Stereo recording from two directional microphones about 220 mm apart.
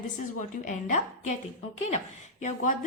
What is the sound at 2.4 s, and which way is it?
Speech, 35° left (ahead or behind).